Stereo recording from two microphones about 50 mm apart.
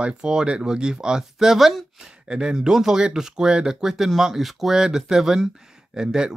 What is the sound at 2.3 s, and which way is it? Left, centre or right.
Speech, centre.